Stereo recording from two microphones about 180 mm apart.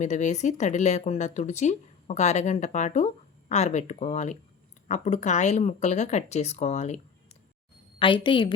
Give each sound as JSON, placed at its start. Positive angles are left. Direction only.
{"t": 0.0, "sound": "speech", "side_deg": 40}
{"t": 7.9, "sound": "a woman's voice", "side_deg": 30}